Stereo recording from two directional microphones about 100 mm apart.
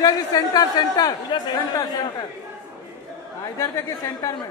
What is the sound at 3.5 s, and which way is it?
Speech, 35° left (ahead or behind).